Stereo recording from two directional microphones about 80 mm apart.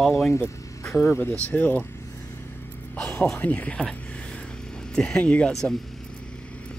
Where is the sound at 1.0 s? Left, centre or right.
Left.